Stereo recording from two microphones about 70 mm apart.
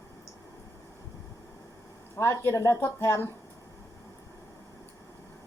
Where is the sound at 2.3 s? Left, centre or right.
Left.